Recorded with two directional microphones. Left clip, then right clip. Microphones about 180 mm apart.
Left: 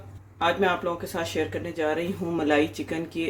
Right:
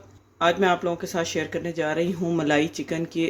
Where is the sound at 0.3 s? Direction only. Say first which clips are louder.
Right 3 dB; 35° right (ahead or behind).